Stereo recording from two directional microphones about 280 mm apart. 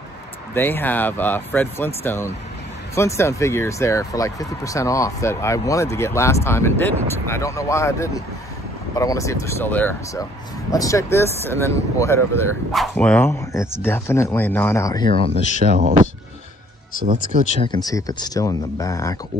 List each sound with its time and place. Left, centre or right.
0.6 s speech: centre
15.6 s speech: right
17.6 s speech: centre